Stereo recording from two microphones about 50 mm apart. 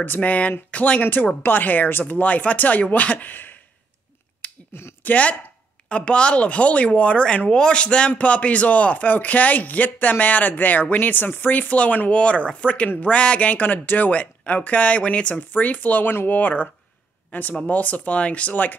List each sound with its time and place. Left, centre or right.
0.0 s speech: left
1.0 s speech: left
4.4 s a sound: left
5.0 s speech: left